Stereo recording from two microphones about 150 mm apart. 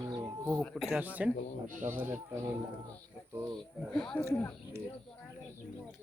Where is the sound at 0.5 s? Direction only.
Centre (ahead or behind).